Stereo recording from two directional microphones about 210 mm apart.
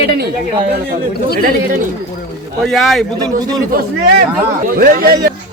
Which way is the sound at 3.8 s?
45° right (ahead or behind).